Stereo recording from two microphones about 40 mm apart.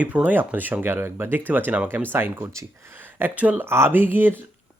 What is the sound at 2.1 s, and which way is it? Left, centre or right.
Speech, right.